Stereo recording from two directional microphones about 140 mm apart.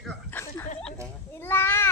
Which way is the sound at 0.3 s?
15° left (ahead or behind).